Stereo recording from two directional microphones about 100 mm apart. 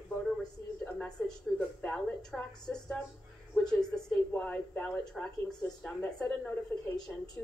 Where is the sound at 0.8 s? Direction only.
15° left (ahead or behind).